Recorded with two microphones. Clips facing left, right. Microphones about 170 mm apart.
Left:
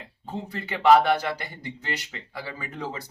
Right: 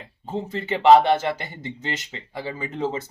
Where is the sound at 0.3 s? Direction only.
20° right (ahead or behind).